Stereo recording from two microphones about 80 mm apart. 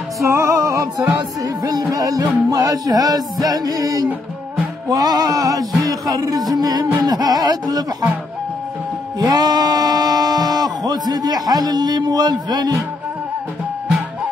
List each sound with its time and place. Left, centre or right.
0.2 s music: right
9.2 s music: right